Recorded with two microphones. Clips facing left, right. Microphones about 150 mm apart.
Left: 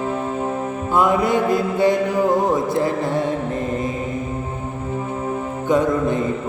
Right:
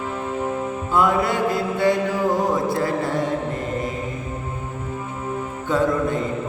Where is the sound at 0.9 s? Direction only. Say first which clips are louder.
Left 2 dB; 20° left (ahead or behind).